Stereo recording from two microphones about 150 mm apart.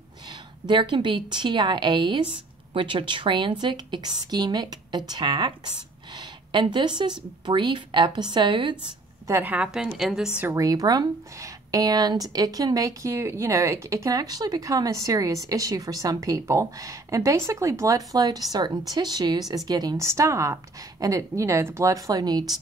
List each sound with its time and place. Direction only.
0.7 s speech: 30° right (ahead or behind)
9.3 s a woman's voice: 10° right (ahead or behind)
10.5 s speech: 20° right (ahead or behind)